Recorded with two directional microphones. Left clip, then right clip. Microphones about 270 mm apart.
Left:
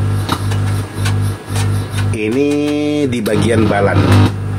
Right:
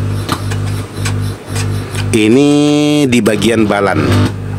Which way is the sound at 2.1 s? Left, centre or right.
Right.